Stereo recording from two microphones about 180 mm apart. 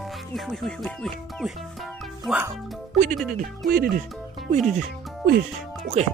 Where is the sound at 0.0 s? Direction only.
Centre (ahead or behind).